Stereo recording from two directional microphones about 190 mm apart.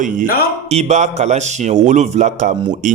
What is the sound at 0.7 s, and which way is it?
A man's voice, 35° right (ahead or behind).